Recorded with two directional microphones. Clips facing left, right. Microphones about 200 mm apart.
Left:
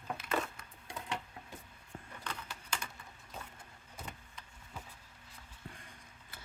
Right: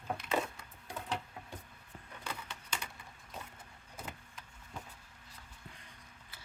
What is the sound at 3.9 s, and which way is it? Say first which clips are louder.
Vehicle: right 1 dB; 5° right (ahead or behind).